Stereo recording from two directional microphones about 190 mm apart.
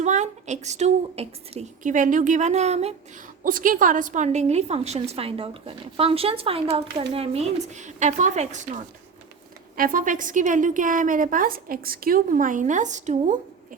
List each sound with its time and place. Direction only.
0.0 s a woman's voice: 40° right (ahead or behind)
3.4 s a woman's voice: 45° right (ahead or behind)